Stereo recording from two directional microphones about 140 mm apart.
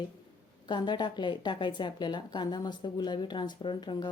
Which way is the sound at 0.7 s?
30° left (ahead or behind).